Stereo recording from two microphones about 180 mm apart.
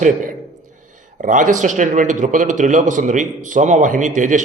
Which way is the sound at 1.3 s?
45° right (ahead or behind).